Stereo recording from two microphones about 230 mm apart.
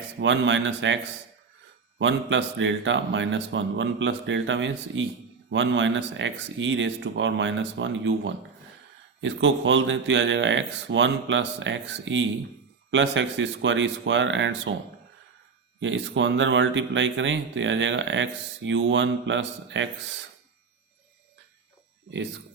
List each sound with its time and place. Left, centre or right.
0.2 s speech: right
2.0 s speech: right
15.8 s speech: right